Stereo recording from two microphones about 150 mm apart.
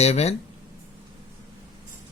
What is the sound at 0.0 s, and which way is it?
Speech, 45° left (ahead or behind).